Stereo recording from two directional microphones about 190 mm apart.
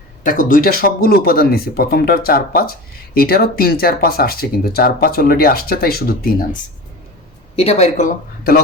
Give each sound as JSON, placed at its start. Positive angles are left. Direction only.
{"t": 0.2, "sound": "speech", "side_deg": 45}
{"t": 7.5, "sound": "speech", "side_deg": 35}